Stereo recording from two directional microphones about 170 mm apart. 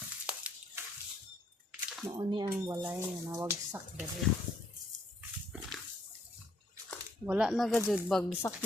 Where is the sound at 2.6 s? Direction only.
15° right (ahead or behind).